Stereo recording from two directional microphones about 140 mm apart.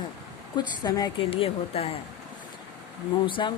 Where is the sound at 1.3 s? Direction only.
45° left (ahead or behind).